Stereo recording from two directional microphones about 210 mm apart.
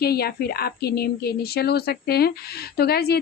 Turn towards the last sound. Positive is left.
turn(degrees=50)  # may be behind; listen again after turning